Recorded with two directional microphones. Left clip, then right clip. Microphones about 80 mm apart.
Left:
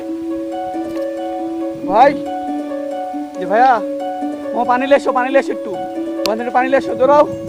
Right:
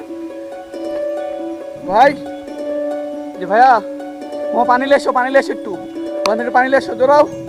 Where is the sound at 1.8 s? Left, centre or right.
Right.